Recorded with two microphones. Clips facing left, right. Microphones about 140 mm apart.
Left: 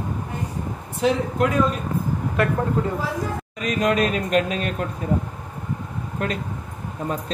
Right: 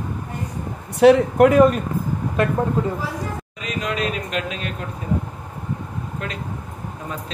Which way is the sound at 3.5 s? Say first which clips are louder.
Left 6 dB; 45° left (ahead or behind).